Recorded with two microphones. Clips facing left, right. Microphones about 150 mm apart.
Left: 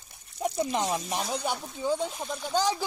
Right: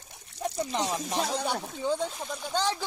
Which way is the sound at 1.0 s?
90° right.